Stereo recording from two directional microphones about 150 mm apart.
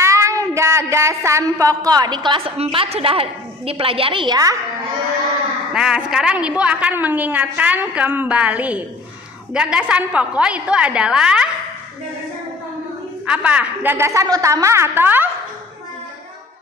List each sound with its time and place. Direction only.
0.0 s a sound: 20° right (ahead or behind)
5.7 s a woman's voice: 5° right (ahead or behind)
13.3 s a woman's voice: 10° right (ahead or behind)